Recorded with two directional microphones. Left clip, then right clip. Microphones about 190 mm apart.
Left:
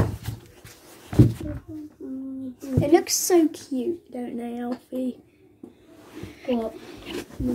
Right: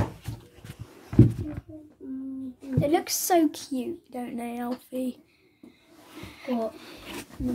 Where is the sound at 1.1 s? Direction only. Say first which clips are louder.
Left 1 dB; 55° left (ahead or behind).